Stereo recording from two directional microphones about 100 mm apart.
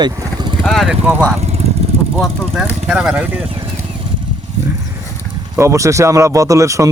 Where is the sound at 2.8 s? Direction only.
10° right (ahead or behind).